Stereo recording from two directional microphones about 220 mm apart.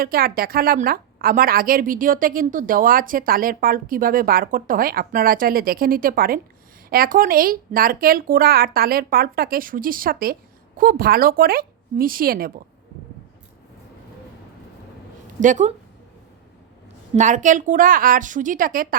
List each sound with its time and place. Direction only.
0.0 s a woman's voice: 40° right (ahead or behind)
15.4 s a woman's voice: 35° right (ahead or behind)
17.2 s a woman's voice: 35° right (ahead or behind)